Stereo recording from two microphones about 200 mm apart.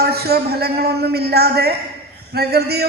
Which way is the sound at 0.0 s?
50° right (ahead or behind).